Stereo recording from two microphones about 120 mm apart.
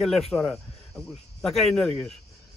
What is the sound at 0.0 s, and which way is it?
Speech, centre (ahead or behind).